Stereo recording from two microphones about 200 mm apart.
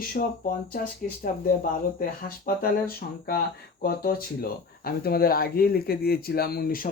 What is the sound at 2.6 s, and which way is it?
Speech, 50° left (ahead or behind).